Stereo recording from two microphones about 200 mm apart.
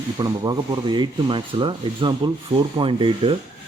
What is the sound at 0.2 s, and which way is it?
Speech, 20° right (ahead or behind).